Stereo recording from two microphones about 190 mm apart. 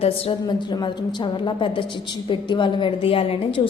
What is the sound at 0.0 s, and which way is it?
A woman's voice, 30° left (ahead or behind).